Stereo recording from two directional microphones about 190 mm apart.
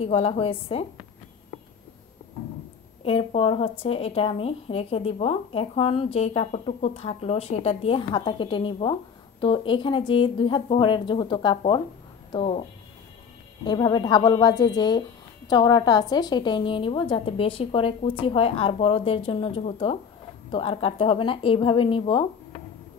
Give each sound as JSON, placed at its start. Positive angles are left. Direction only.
{"t": 0.0, "sound": "speech", "side_deg": 30}
{"t": 3.0, "sound": "a woman's voice", "side_deg": 30}
{"t": 13.7, "sound": "a woman's voice", "side_deg": 20}